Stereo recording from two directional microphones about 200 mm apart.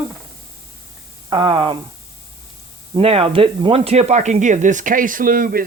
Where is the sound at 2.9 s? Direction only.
30° right (ahead or behind).